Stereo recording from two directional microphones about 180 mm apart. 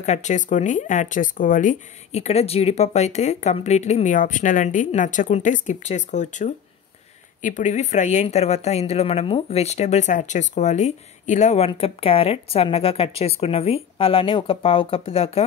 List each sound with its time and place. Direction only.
0.0 s speech: 40° left (ahead or behind)